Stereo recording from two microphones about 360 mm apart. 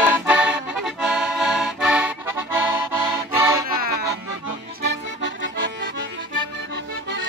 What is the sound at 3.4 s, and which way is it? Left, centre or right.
Music, centre.